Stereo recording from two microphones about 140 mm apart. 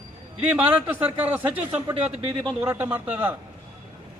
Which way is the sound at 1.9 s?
45° right (ahead or behind).